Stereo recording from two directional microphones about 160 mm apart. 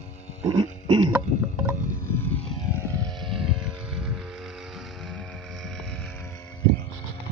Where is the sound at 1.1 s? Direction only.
10° right (ahead or behind).